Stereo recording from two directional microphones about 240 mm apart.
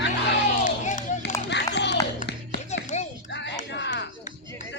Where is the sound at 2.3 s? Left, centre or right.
Left.